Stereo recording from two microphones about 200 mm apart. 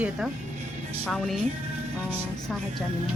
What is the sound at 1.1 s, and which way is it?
Speech, centre (ahead or behind).